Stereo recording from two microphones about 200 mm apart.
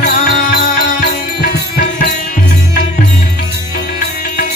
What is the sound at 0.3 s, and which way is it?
Music, 45° left (ahead or behind).